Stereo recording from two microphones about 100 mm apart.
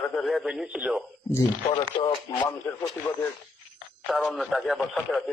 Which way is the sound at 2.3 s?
35° left (ahead or behind).